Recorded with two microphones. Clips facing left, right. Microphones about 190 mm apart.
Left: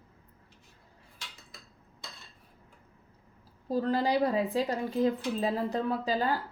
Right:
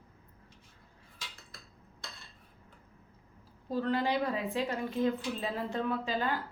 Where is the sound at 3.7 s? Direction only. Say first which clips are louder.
Left 3 dB; 35° left (ahead or behind).